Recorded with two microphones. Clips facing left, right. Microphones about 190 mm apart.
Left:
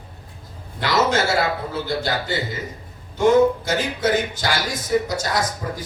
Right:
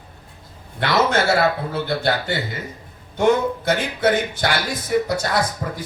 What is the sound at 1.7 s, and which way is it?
Speech, 60° right (ahead or behind).